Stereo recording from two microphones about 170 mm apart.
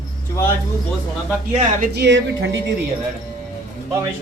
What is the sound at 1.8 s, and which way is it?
Speech, 80° right.